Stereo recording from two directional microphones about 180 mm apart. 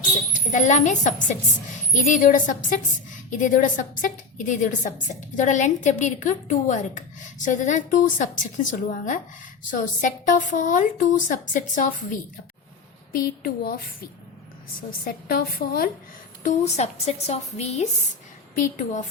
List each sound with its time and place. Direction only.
0.3 s a woman's voice: 45° left (ahead or behind)
14.8 s a woman's voice: 50° left (ahead or behind)
16.4 s a woman's voice: 40° left (ahead or behind)